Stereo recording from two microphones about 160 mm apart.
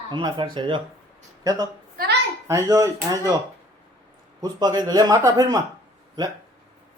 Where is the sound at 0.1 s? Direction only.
30° right (ahead or behind).